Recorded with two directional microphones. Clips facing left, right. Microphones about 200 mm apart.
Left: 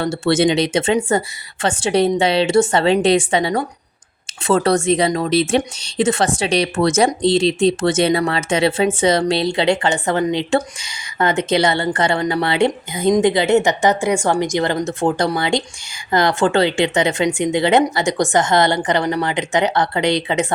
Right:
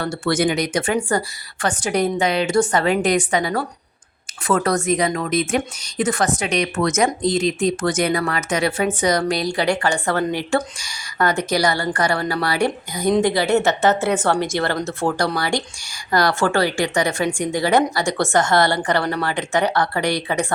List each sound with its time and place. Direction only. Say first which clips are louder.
0.0 s a woman's voice: left 4 dB; 25° left (ahead or behind)